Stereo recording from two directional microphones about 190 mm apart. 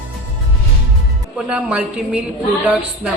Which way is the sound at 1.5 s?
5° right (ahead or behind).